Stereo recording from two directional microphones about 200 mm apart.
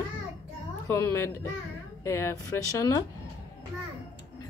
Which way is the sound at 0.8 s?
10° left (ahead or behind).